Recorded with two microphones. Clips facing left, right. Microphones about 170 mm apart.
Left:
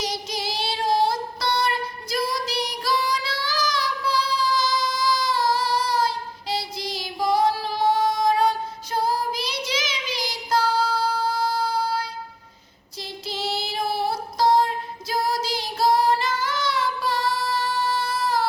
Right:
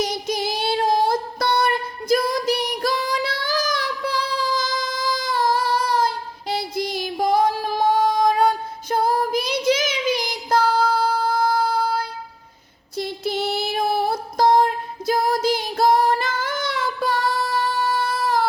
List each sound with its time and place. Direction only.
0.0 s child singing: 50° right (ahead or behind)
13.0 s female singing: 55° right (ahead or behind)